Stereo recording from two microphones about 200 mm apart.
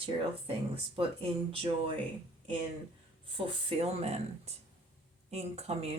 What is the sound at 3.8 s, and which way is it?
A woman's voice, 30° right (ahead or behind).